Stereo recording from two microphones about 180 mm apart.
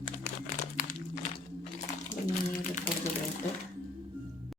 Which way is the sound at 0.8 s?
50° left (ahead or behind).